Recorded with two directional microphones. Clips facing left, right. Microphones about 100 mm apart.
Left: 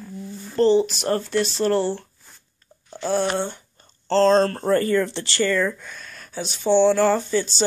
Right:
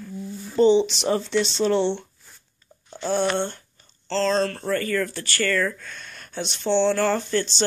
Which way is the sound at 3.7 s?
45° left (ahead or behind).